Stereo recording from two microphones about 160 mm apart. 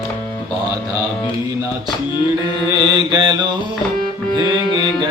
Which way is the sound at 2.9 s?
25° right (ahead or behind).